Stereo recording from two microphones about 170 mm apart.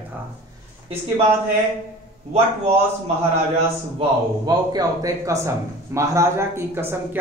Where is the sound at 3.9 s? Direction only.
25° right (ahead or behind).